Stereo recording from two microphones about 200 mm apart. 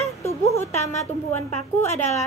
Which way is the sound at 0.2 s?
15° left (ahead or behind).